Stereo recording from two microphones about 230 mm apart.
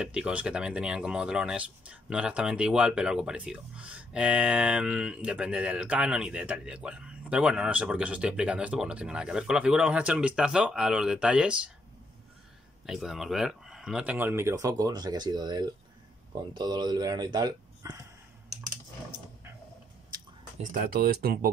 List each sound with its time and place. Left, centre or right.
0.0 s speech: centre
12.8 s speech: centre
20.7 s speech: right